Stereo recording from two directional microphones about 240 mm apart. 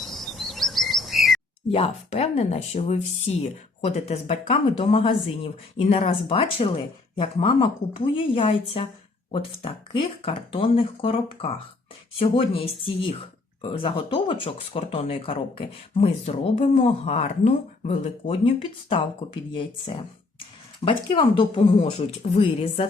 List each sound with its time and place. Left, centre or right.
0.0 s chirp: centre
1.7 s speech: left